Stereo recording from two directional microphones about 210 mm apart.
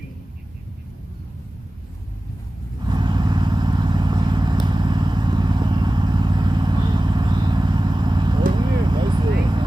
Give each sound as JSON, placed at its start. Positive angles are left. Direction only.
{"t": 2.8, "sound": "vehicle", "side_deg": -20}